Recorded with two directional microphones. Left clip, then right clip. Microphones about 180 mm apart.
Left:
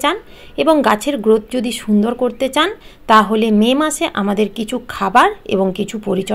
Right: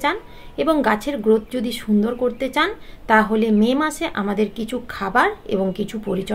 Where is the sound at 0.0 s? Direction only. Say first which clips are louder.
Left 4 dB; 40° left (ahead or behind).